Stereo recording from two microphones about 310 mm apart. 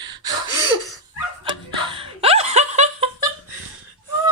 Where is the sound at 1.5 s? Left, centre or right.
Centre.